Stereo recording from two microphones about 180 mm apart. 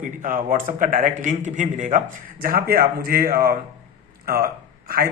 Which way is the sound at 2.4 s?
55° right (ahead or behind).